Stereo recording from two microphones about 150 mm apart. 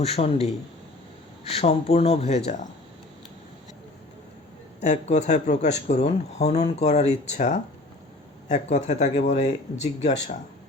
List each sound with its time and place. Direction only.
0.0 s speech: 40° left (ahead or behind)
1.5 s speech: 40° left (ahead or behind)
4.8 s speech: 50° left (ahead or behind)